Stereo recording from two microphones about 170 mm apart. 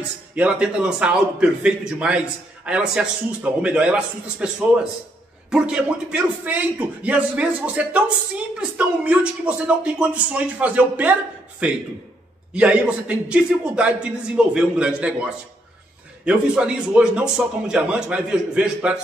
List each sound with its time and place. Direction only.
0.4 s a man's voice: 5° right (ahead or behind)